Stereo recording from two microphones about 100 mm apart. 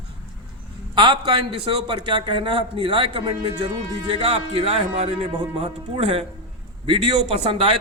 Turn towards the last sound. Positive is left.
turn(degrees=-65)  # may be behind; listen again after turning